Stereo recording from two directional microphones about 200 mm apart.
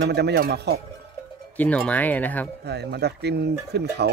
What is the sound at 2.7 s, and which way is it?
Speech, 55° right (ahead or behind).